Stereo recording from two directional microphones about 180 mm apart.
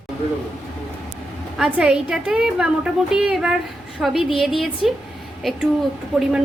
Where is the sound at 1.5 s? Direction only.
5° right (ahead or behind).